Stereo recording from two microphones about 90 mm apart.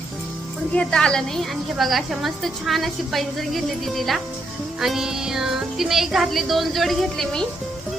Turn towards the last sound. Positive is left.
turn(degrees=5)  # may be behind; listen again after turning